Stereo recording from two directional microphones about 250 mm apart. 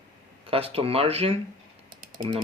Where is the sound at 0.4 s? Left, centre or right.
Right.